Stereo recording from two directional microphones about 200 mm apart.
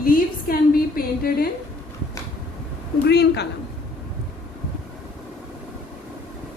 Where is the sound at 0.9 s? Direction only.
45° left (ahead or behind).